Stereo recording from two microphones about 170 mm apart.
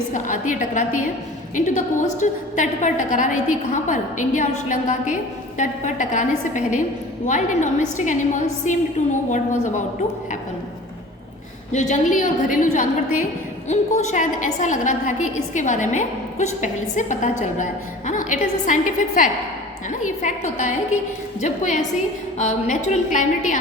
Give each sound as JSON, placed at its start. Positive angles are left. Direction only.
{"t": 0.1, "sound": "a woman's voice", "side_deg": 50}
{"t": 11.7, "sound": "a woman's voice", "side_deg": 45}